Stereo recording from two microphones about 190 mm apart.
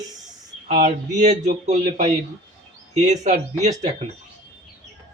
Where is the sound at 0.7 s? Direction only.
40° right (ahead or behind).